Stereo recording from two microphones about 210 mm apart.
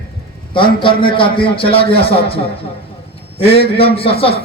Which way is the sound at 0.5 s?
25° left (ahead or behind).